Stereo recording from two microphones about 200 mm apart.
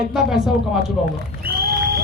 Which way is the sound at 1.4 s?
50° right (ahead or behind).